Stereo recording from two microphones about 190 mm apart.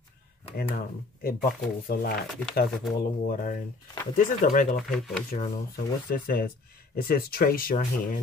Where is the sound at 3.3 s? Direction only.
45° left (ahead or behind).